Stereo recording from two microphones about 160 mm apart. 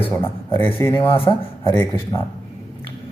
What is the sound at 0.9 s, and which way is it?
Speech, 30° left (ahead or behind).